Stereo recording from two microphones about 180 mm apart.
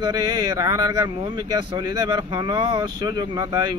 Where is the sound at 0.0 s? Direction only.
20° right (ahead or behind).